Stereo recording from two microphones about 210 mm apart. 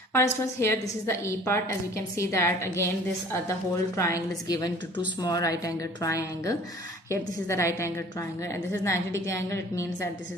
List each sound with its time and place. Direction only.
0.1 s a woman's voice: 10° left (ahead or behind)
3.9 s a woman's voice: 15° left (ahead or behind)